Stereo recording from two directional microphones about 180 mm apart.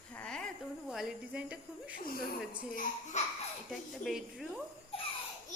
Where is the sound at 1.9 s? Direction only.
55° left (ahead or behind).